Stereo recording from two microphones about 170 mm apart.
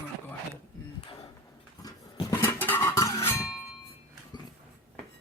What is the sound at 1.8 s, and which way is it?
Music, 20° left (ahead or behind).